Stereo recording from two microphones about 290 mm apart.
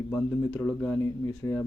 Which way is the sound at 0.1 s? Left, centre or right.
Centre.